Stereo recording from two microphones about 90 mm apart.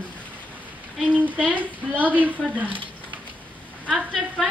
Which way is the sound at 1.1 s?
20° right (ahead or behind).